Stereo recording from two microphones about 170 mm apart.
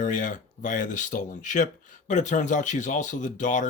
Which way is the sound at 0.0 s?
50° left (ahead or behind).